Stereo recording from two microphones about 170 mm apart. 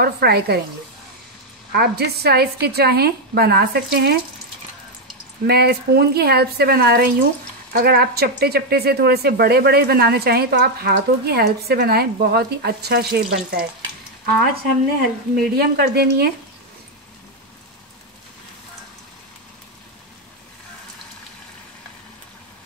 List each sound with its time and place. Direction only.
0.0 s speech: 70° right (ahead or behind)
1.7 s speech: 70° right (ahead or behind)
5.5 s speech: 70° right (ahead or behind)